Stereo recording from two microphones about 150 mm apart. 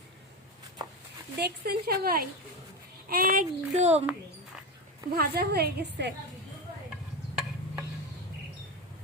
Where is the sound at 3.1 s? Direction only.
75° right (ahead or behind).